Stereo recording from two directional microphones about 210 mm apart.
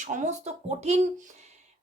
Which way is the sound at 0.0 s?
35° right (ahead or behind).